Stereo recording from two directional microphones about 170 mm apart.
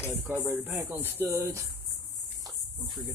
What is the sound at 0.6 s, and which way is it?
Speech, 15° right (ahead or behind).